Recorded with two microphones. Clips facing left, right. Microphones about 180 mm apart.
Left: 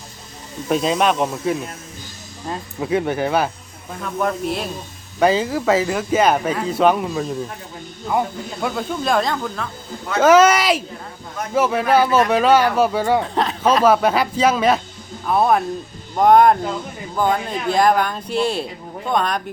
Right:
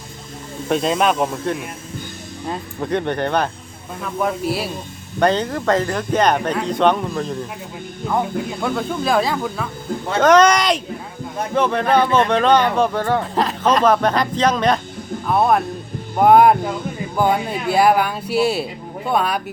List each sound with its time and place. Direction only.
0.7 s speech: centre (ahead or behind)
5.2 s speech: 5° left (ahead or behind)
8.6 s speech: centre (ahead or behind)
10.2 s speech: 5° left (ahead or behind)
13.3 s speech: centre (ahead or behind)